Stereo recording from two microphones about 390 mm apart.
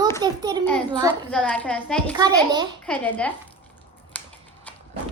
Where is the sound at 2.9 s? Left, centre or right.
Centre.